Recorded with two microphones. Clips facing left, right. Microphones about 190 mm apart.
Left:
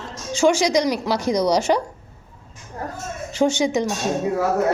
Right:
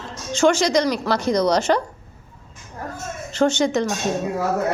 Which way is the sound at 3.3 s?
10° left (ahead or behind).